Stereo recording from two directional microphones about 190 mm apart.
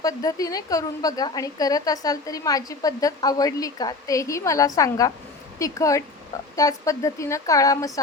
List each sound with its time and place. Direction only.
0.0 s a woman's voice: 20° left (ahead or behind)